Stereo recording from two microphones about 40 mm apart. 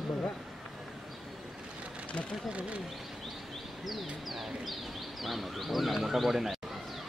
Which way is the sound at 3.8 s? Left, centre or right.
Centre.